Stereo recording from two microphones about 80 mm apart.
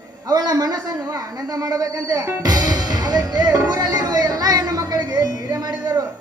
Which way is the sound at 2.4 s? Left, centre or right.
Right.